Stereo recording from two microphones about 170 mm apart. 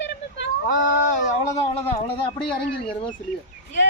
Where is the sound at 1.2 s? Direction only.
40° left (ahead or behind).